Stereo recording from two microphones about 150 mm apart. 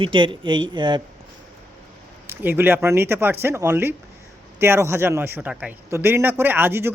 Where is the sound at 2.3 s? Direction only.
15° right (ahead or behind).